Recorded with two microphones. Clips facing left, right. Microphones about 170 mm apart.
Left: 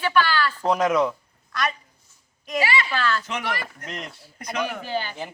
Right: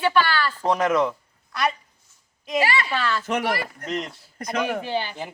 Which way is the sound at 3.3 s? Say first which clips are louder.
Right 5 dB; 45° right (ahead or behind).